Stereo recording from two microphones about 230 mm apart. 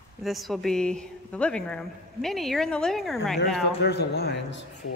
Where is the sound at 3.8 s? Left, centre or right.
Left.